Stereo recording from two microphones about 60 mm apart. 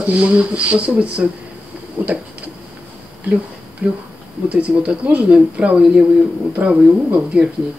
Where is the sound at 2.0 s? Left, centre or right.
Right.